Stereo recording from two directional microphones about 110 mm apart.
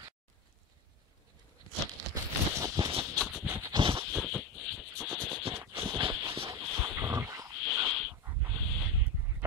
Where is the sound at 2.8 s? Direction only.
50° right (ahead or behind).